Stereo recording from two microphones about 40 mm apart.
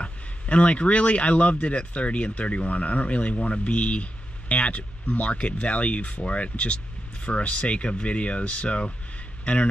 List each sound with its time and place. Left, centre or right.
0.0 s speech: left